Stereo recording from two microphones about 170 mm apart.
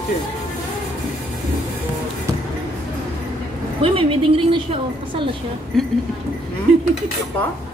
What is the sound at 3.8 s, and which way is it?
A woman's voice, 30° right (ahead or behind).